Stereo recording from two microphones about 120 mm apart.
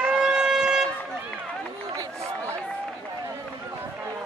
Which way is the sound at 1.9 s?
25° right (ahead or behind).